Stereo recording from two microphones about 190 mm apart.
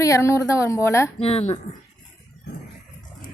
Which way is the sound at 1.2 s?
35° left (ahead or behind).